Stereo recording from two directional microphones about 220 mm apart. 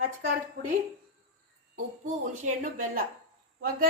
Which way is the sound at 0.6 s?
45° right (ahead or behind).